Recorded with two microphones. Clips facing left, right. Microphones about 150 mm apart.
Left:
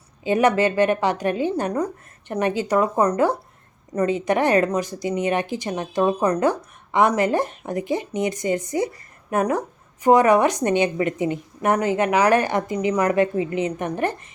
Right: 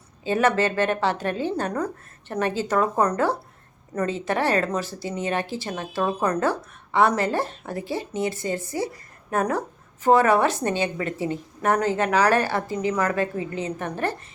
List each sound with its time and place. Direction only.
0.3 s speech: 15° left (ahead or behind)